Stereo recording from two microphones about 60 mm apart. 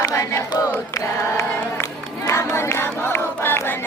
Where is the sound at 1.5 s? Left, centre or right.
Left.